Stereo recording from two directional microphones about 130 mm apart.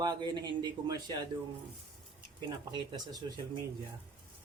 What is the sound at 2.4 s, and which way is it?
Speech, 35° right (ahead or behind).